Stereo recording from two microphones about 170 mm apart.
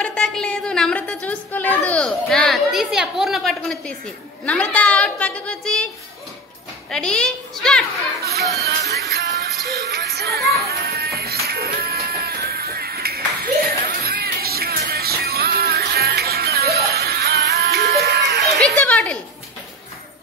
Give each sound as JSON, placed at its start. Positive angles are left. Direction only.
{"t": 0.0, "sound": "a woman's voice", "side_deg": 5}
{"t": 6.9, "sound": "a child's voice", "side_deg": 5}
{"t": 8.9, "sound": "music", "side_deg": -75}
{"t": 18.6, "sound": "a sound", "side_deg": 5}